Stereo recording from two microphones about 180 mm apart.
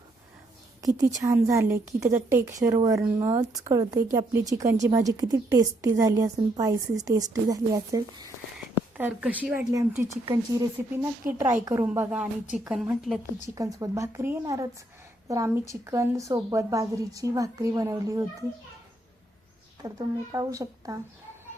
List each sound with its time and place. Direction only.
0.8 s a woman's voice: 20° right (ahead or behind)
9.0 s a woman's voice: 10° right (ahead or behind)
13.6 s a woman's voice: 20° right (ahead or behind)
19.8 s a woman's voice: 20° right (ahead or behind)